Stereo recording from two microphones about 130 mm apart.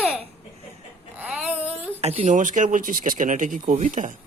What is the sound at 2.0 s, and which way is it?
Speech, 60° right (ahead or behind).